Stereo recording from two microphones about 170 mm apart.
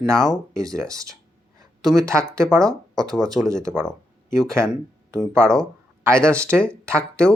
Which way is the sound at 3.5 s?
20° right (ahead or behind).